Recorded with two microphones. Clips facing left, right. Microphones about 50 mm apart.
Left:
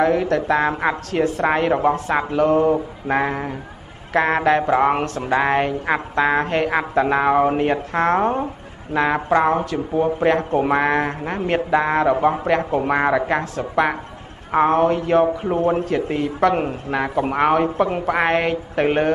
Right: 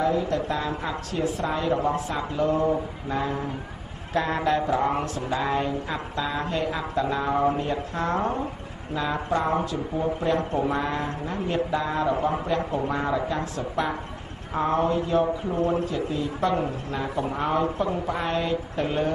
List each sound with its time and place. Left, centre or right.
0.0 s a woman's voice: left
5.3 s a woman's voice: left
8.9 s a woman's voice: left
9.7 s a woman's voice: left
15.4 s a man's voice: left
15.9 s a woman's voice: left